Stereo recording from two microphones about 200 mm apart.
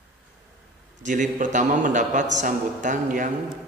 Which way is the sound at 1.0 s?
40° right (ahead or behind).